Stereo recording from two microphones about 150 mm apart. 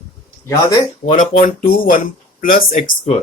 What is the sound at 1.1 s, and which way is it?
Speech, 65° left (ahead or behind).